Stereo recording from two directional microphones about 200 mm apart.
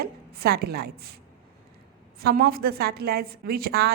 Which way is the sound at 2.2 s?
50° right (ahead or behind).